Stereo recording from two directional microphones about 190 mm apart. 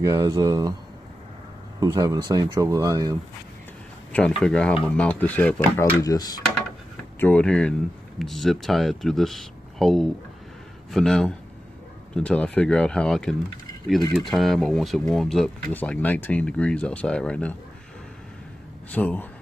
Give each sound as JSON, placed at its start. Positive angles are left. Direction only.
{"t": 0.0, "sound": "speech", "side_deg": -20}
{"t": 1.8, "sound": "speech", "side_deg": -20}
{"t": 4.4, "sound": "speech", "side_deg": 5}
{"t": 6.0, "sound": "speech", "side_deg": 20}
{"t": 7.2, "sound": "speech", "side_deg": 10}
{"t": 18.9, "sound": "speech", "side_deg": 10}